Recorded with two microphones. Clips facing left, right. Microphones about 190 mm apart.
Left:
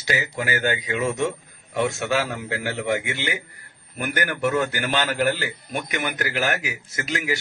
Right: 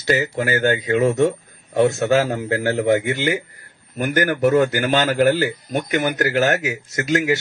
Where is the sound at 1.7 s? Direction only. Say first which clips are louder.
Right 7 dB; 40° right (ahead or behind).